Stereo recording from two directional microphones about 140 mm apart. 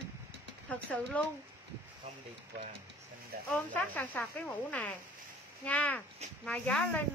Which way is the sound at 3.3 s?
90° right.